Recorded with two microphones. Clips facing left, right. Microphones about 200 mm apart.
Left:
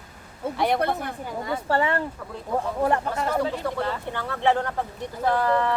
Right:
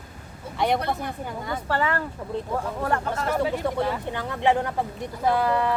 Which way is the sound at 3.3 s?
15° right (ahead or behind).